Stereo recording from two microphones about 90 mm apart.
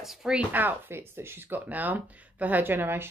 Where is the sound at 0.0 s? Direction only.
5° right (ahead or behind).